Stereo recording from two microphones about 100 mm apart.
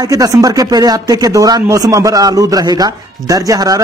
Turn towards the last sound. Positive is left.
turn(degrees=-35)  # may be behind; listen again after turning